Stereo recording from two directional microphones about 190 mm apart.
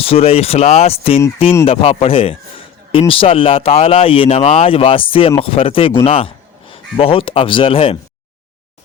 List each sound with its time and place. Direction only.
0.0 s a man's voice: 30° left (ahead or behind)